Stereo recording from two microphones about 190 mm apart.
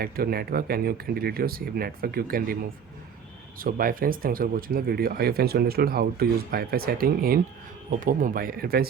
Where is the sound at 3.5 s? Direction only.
50° right (ahead or behind).